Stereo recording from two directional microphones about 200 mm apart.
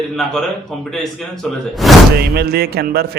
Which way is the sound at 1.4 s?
Centre (ahead or behind).